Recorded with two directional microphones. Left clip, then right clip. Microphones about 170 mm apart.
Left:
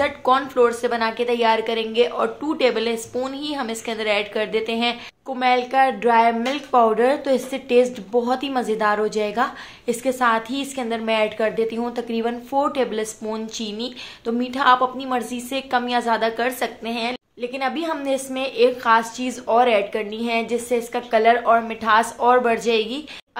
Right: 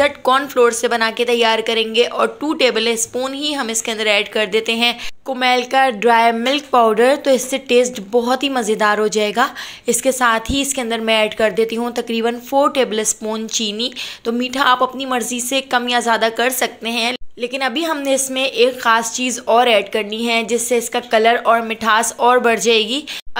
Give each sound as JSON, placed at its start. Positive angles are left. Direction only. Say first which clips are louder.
{"t": 0.0, "sound": "a woman's voice", "louder": "right 4 dB", "side_deg": -20}